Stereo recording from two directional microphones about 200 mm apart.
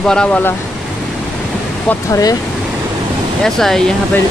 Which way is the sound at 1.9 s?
15° left (ahead or behind).